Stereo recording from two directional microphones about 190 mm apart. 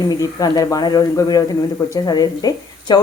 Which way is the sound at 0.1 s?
20° left (ahead or behind).